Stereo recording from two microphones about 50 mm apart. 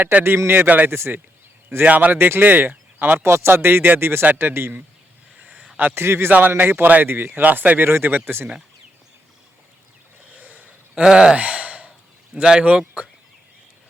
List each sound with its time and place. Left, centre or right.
0.3 s speech: right
0.9 s a man's voice: right
1.8 s speech: right
2.1 s speech: right
2.4 s speech: right
5.4 s a sound: right
5.9 s a man's voice: right
6.6 s speech: right
10.3 s a sound: right
11.0 s speech: centre
11.3 s sigh: right
12.3 s speech: centre